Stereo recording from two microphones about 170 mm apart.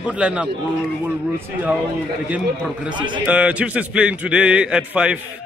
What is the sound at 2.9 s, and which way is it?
Speech, 25° right (ahead or behind).